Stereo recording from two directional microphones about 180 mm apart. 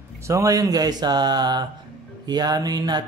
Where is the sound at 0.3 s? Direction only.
20° right (ahead or behind).